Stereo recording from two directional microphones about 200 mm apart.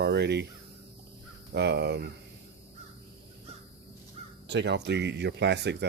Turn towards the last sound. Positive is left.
turn(degrees=-60)  # may be behind; listen again after turning